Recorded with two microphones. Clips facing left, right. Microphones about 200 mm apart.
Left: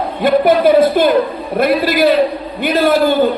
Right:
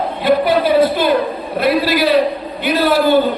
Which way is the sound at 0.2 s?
50° left (ahead or behind).